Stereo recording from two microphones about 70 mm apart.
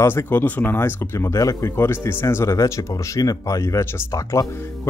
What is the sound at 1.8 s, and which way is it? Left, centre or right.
Speech, left.